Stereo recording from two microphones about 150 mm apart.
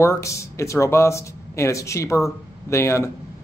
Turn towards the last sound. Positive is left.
turn(degrees=20)  # may be behind; listen again after turning